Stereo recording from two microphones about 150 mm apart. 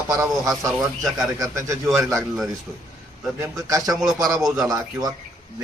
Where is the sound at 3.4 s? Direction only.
20° right (ahead or behind).